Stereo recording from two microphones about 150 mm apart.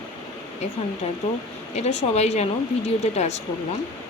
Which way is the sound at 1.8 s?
45° left (ahead or behind).